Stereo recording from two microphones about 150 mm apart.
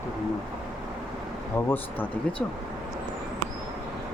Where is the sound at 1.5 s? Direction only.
15° left (ahead or behind).